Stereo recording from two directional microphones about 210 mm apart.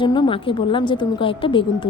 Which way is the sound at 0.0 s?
20° left (ahead or behind).